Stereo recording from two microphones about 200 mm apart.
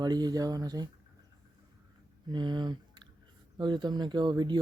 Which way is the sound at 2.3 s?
20° right (ahead or behind).